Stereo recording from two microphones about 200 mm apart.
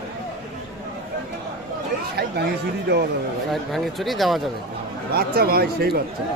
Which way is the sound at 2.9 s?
55° right (ahead or behind).